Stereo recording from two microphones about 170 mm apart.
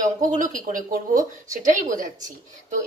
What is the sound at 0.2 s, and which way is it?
Speech, 50° right (ahead or behind).